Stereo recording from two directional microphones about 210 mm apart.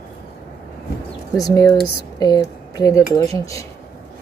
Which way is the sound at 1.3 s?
15° left (ahead or behind).